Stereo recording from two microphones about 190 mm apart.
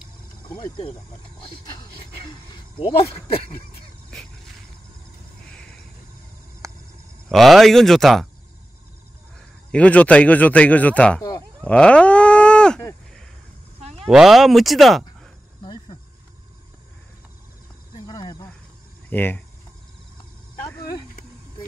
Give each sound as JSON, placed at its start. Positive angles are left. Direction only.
{"t": 0.6, "sound": "speech", "side_deg": 25}
{"t": 5.5, "sound": "crow", "side_deg": 5}
{"t": 7.2, "sound": "speech", "side_deg": 0}
{"t": 9.7, "sound": "a man's voice", "side_deg": 5}
{"t": 11.6, "sound": "livestock", "side_deg": 5}
{"t": 13.7, "sound": "a sound", "side_deg": -35}
{"t": 14.0, "sound": "speech", "side_deg": 0}
{"t": 15.6, "sound": "cricket", "side_deg": 25}
{"t": 18.0, "sound": "a sound", "side_deg": 20}
{"t": 19.0, "sound": "speech", "side_deg": 10}